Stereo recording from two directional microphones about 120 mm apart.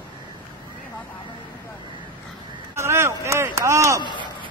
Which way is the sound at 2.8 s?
25° right (ahead or behind).